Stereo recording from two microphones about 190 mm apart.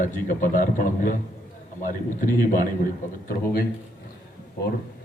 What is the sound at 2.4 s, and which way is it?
Speech, 45° left (ahead or behind).